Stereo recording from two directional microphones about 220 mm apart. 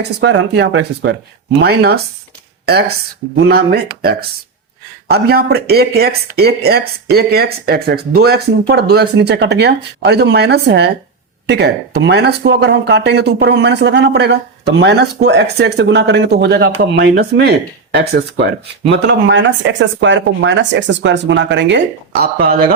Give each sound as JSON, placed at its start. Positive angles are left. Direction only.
{"t": 0.2, "sound": "speech", "side_deg": -55}
{"t": 5.0, "sound": "speech", "side_deg": -45}